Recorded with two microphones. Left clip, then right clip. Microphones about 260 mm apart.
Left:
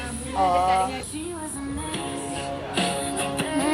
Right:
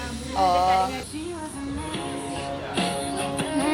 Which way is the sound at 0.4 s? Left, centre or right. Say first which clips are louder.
Right 1 dB; right.